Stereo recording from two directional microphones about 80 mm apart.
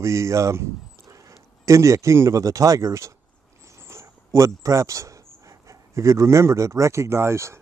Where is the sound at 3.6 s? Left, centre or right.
Right.